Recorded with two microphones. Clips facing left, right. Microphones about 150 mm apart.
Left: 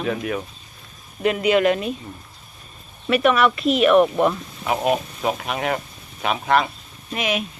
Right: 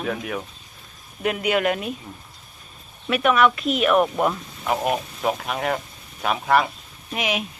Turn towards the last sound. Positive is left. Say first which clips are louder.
# left 2 dB
turn(degrees=-15)  # may be behind; listen again after turning